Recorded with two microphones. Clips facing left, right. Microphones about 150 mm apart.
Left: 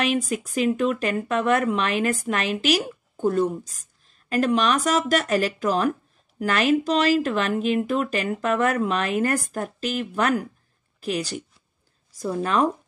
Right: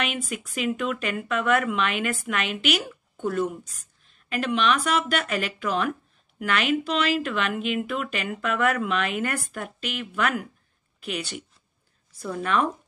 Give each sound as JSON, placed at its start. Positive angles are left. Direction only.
{"t": 0.0, "sound": "speech", "side_deg": 35}